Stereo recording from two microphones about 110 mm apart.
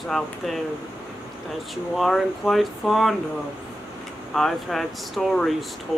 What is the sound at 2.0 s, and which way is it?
Speech, 5° left (ahead or behind).